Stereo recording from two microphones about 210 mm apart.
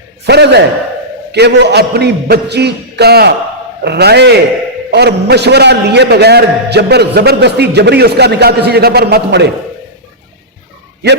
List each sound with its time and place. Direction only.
0.3 s a man's voice: 55° right (ahead or behind)